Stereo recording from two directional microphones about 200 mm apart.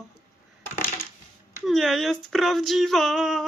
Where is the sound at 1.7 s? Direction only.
Centre (ahead or behind).